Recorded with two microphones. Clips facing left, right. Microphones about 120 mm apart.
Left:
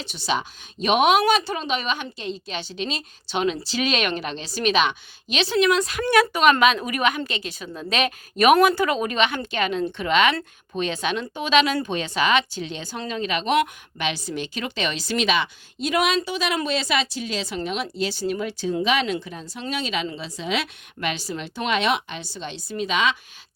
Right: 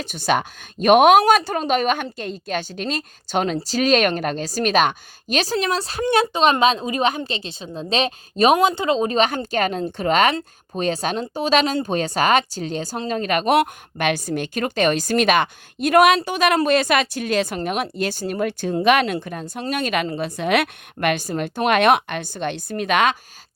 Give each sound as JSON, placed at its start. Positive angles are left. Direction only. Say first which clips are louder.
{"t": 0.0, "sound": "a woman's voice", "louder": "right 5 dB", "side_deg": -50}